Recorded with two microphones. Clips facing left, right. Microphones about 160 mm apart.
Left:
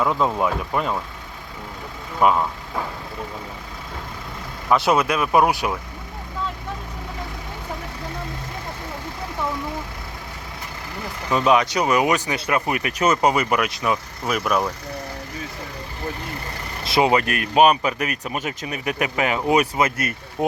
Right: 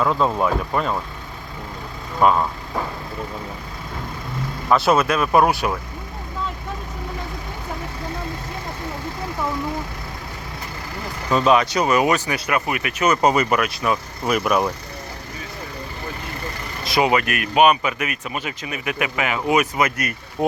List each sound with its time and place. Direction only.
0.0 s speech: 15° left (ahead or behind)
2.2 s speech: 15° left (ahead or behind)
4.7 s speech: 15° left (ahead or behind)
11.3 s speech: 10° left (ahead or behind)
12.5 s speech: 30° left (ahead or behind)
13.2 s speech: 10° left (ahead or behind)
14.3 s speech: centre (ahead or behind)
16.8 s speech: 25° left (ahead or behind)